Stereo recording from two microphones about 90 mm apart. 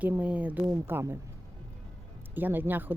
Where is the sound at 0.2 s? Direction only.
15° right (ahead or behind).